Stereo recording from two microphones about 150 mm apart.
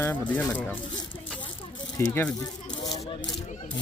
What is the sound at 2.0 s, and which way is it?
Speech, 15° left (ahead or behind).